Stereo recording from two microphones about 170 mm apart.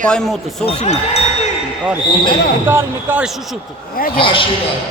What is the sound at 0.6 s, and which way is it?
Speech, 40° left (ahead or behind).